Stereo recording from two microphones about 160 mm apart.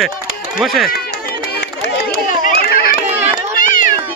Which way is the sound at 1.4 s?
90° left.